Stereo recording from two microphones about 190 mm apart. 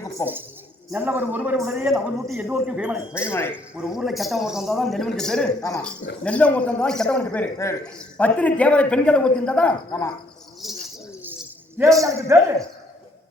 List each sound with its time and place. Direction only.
0.2 s a man's voice: 15° left (ahead or behind)
0.9 s a man's voice: 10° right (ahead or behind)
3.1 s a man's voice: 15° left (ahead or behind)
3.5 s speech: 5° right (ahead or behind)
5.5 s a man's voice: 20° left (ahead or behind)
6.2 s a man's voice: 5° left (ahead or behind)
10.6 s bird: centre (ahead or behind)
11.8 s a man's voice: 15° right (ahead or behind)